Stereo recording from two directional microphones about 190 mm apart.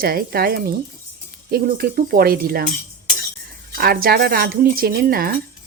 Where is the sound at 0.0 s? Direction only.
50° right (ahead or behind).